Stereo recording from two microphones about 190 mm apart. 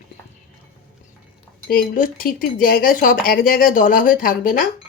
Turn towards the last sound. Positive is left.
turn(degrees=45)  # may be behind; listen again after turning